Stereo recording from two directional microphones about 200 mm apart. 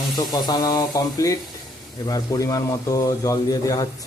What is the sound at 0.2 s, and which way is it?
Speech, 20° left (ahead or behind).